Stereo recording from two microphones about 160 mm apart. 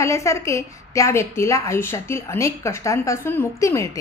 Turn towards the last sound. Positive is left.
turn(degrees=20)  # may be behind; listen again after turning